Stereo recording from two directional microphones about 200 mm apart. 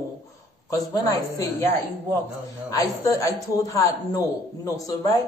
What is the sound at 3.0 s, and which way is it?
Speech, 15° left (ahead or behind).